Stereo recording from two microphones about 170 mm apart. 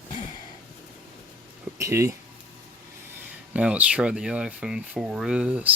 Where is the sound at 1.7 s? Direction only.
15° right (ahead or behind).